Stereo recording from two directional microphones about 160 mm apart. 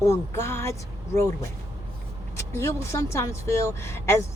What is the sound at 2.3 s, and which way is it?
Speech, 15° left (ahead or behind).